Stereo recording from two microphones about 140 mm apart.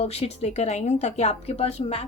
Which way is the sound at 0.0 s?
45° left (ahead or behind).